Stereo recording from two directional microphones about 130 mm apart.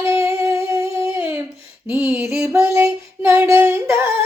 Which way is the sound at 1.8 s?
10° right (ahead or behind).